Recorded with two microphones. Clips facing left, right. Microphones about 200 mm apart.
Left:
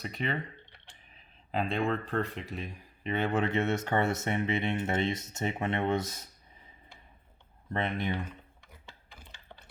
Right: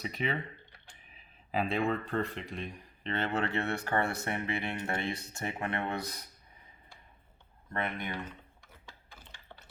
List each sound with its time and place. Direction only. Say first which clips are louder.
0.0 s speech: even; centre (ahead or behind); by 6.2 s 25° left (ahead or behind)
7.7 s speech: left 4 dB; 25° left (ahead or behind)